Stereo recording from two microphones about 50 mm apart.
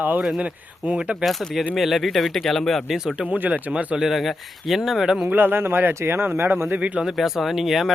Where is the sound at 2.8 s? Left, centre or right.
Centre.